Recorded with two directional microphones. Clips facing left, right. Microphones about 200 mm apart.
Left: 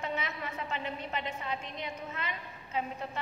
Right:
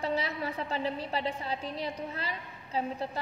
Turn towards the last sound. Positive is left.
turn(degrees=-35)  # may be behind; listen again after turning